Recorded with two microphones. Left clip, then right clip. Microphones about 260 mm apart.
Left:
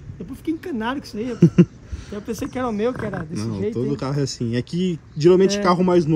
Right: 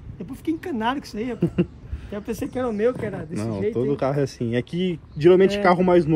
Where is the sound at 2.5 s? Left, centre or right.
Left.